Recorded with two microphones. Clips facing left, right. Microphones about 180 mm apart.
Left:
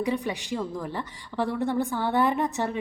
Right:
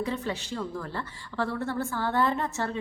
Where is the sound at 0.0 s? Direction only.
15° left (ahead or behind).